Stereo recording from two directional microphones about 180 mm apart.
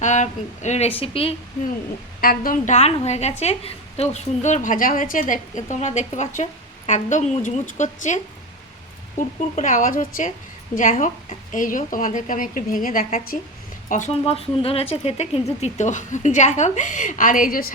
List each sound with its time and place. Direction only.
0.0 s a woman's voice: 40° left (ahead or behind)
2.2 s a woman's voice: 50° left (ahead or behind)